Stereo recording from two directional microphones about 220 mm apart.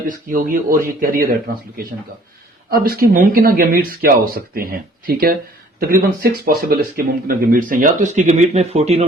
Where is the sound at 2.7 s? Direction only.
40° right (ahead or behind).